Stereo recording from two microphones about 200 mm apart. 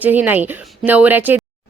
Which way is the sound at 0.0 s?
10° right (ahead or behind).